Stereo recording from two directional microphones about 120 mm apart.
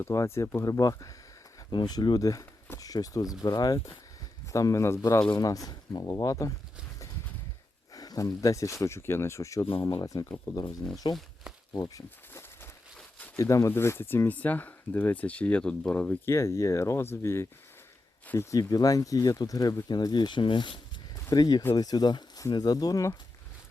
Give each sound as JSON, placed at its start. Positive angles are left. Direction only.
{"t": 0.0, "sound": "speech", "side_deg": 25}
{"t": 7.9, "sound": "speech", "side_deg": 30}
{"t": 11.7, "sound": "speech", "side_deg": 30}
{"t": 13.0, "sound": "a sound", "side_deg": 10}
{"t": 13.3, "sound": "speech", "side_deg": 25}
{"t": 16.2, "sound": "speech", "side_deg": 25}
{"t": 21.2, "sound": "speech", "side_deg": 35}